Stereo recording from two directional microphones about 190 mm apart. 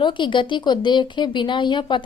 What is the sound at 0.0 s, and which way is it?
Speech, 25° left (ahead or behind).